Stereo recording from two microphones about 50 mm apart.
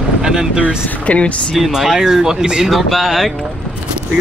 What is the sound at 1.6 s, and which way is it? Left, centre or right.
Speech, centre.